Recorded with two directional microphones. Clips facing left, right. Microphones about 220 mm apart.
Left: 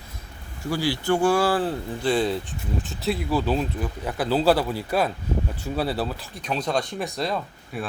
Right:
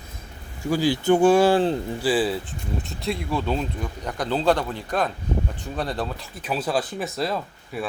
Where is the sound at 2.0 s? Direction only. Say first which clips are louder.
Even; 5° right (ahead or behind).